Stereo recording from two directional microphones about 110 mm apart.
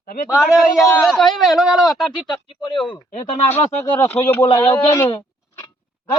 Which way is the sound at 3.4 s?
20° left (ahead or behind).